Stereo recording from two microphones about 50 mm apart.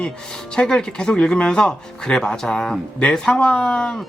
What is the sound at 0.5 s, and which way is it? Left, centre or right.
Speech, centre.